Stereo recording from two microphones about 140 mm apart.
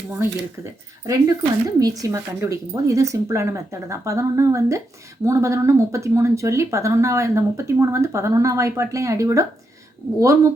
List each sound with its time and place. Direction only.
0.1 s speech: 15° right (ahead or behind)